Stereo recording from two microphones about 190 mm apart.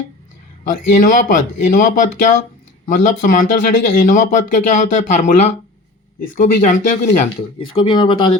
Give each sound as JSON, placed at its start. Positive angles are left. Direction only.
{"t": 0.7, "sound": "speech", "side_deg": 45}
{"t": 6.1, "sound": "speech", "side_deg": 50}
{"t": 7.8, "sound": "speech", "side_deg": 25}